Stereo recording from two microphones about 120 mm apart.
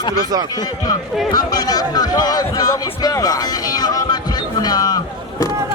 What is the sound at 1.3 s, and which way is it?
Speech, 35° left (ahead or behind).